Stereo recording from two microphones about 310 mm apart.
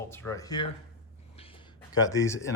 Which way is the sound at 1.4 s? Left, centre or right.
Centre.